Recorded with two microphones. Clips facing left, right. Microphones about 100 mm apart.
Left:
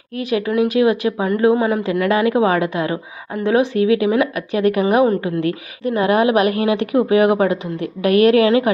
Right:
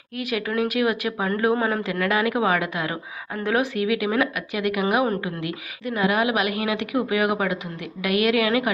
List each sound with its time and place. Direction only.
0.2 s a woman's voice: 30° left (ahead or behind)